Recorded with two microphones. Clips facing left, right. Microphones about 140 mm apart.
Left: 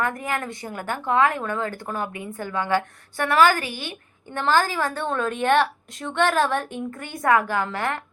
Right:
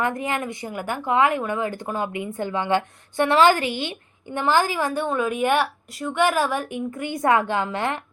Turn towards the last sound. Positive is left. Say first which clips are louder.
# right 1 dB
turn(degrees=-20)  # may be behind; listen again after turning